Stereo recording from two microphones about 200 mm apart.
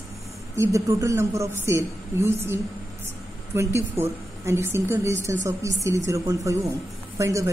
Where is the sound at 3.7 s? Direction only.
15° right (ahead or behind).